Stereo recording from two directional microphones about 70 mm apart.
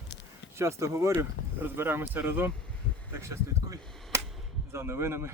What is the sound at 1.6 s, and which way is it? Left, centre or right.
Speech, right.